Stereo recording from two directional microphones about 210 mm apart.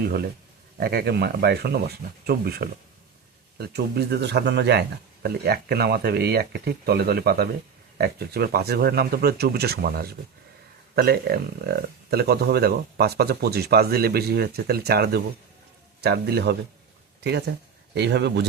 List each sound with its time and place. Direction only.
0.8 s speech: 50° right (ahead or behind)